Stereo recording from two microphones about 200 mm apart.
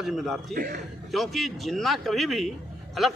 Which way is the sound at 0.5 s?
50° right (ahead or behind).